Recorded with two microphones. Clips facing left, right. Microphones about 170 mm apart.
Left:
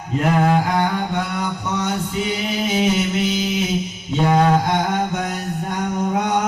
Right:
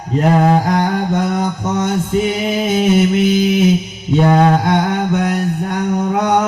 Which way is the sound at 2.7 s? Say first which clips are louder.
Right 6 dB; 55° right (ahead or behind).